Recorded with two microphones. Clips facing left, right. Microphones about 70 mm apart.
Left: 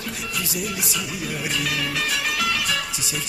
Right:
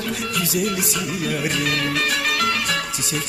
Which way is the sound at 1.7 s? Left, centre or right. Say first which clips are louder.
Right 4 dB; right.